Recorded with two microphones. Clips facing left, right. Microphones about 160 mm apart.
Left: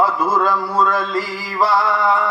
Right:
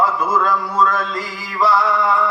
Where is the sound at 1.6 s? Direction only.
30° left (ahead or behind).